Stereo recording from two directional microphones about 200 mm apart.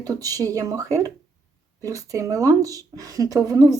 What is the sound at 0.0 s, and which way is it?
A woman's voice, 20° right (ahead or behind).